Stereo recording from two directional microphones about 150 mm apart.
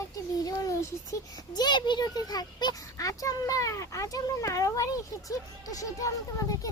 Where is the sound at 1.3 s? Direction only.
30° left (ahead or behind).